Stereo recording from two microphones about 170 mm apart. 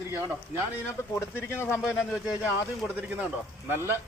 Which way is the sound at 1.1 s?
15° left (ahead or behind).